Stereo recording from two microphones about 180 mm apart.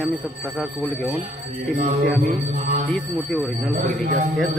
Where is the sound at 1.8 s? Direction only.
45° right (ahead or behind).